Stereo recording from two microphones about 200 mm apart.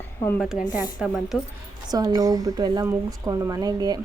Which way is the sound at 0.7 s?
20° left (ahead or behind).